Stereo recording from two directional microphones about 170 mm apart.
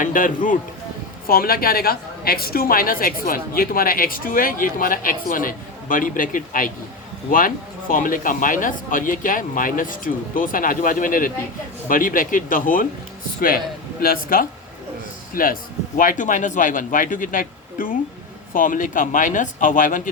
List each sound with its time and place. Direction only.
0.0 s a woman's voice: 50° left (ahead or behind)
14.0 s a woman's voice: 55° left (ahead or behind)